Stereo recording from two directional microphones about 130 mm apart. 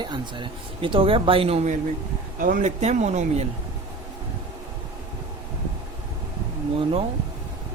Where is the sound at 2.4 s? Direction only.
75° right (ahead or behind); by 3.4 s 60° right (ahead or behind).